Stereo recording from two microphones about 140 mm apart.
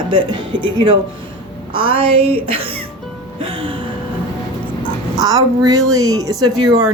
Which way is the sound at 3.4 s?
40° right (ahead or behind).